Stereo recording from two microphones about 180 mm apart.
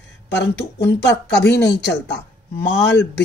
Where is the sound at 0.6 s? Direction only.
70° left (ahead or behind).